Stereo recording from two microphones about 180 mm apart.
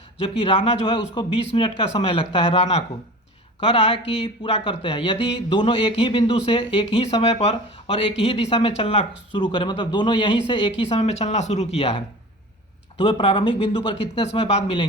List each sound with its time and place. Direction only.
0.2 s speech: 30° left (ahead or behind)